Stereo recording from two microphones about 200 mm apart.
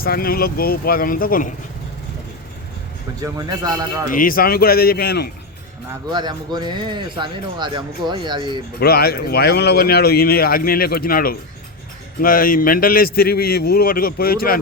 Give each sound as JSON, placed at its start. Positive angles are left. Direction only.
{"t": 0.0, "sound": "speech", "side_deg": 50}
{"t": 3.2, "sound": "a man's voice", "side_deg": -20}
{"t": 4.1, "sound": "speech", "side_deg": 45}
{"t": 5.9, "sound": "speech", "side_deg": -20}
{"t": 8.8, "sound": "speech", "side_deg": 50}